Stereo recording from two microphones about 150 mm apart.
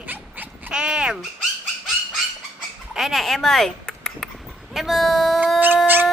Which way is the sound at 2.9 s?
Centre (ahead or behind).